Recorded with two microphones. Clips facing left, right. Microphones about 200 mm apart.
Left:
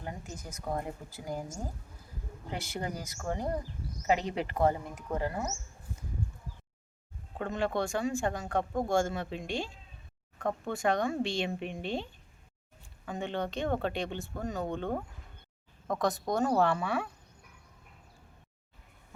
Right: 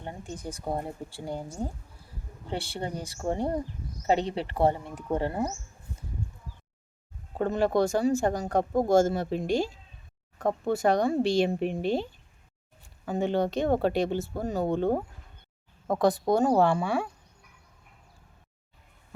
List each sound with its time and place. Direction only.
0.0 s speech: 30° right (ahead or behind)
2.5 s speech: 30° right (ahead or behind)
7.3 s speech: 35° right (ahead or behind)
13.1 s speech: 35° right (ahead or behind)